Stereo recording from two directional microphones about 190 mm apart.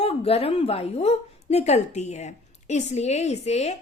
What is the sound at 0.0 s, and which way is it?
A woman's voice, 30° left (ahead or behind).